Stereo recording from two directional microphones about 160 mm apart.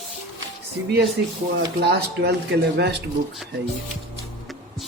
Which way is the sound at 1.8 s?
90° right.